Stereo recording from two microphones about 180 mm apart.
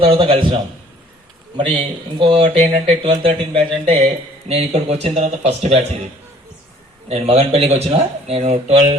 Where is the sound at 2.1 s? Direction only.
25° right (ahead or behind).